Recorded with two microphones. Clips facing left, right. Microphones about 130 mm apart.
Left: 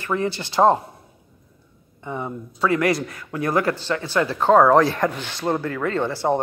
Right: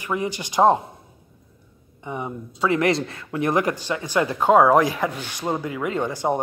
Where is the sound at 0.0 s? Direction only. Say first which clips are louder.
Left 2 dB; 15° right (ahead or behind).